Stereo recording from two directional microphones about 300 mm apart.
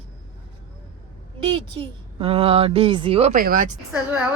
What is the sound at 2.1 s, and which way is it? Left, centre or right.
Speech, centre.